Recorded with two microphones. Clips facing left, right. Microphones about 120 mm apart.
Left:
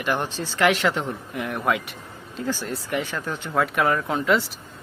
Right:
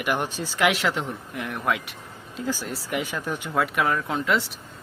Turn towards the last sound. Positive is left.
turn(degrees=0)  # may be behind; listen again after turning